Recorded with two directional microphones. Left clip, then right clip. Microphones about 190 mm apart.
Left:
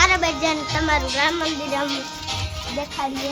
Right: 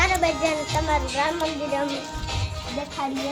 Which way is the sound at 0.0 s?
65° left (ahead or behind).